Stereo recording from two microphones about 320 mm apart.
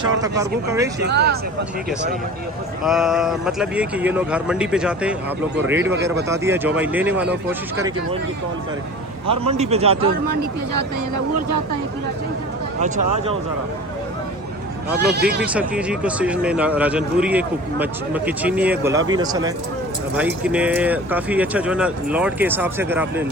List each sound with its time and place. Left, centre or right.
0.2 s speech: centre
0.9 s speech: right
2.8 s speech: centre
9.5 s speech: centre
14.8 s speech: right
15.4 s speech: centre